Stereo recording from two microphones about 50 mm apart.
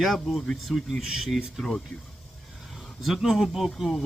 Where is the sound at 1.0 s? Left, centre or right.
Centre.